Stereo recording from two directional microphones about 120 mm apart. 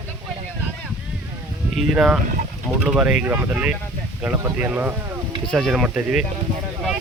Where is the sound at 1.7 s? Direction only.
5° right (ahead or behind).